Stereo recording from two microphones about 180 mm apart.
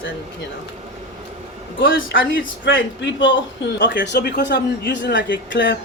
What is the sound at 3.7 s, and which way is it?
Speech, 75° left (ahead or behind).